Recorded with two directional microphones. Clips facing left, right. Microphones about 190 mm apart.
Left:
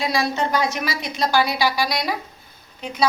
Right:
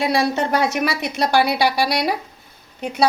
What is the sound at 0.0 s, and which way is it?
A woman's voice, 60° right (ahead or behind).